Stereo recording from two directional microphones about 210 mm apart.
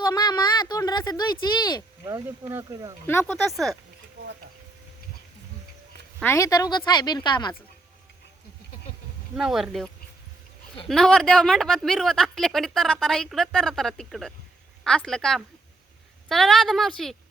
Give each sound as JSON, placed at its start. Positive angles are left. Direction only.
{"t": 0.0, "sound": "a sound", "side_deg": 20}
{"t": 2.0, "sound": "speech", "side_deg": -15}
{"t": 3.1, "sound": "speech", "side_deg": 10}
{"t": 3.5, "sound": "speech", "side_deg": 0}
{"t": 6.2, "sound": "speech", "side_deg": 15}
{"t": 9.3, "sound": "speech", "side_deg": 0}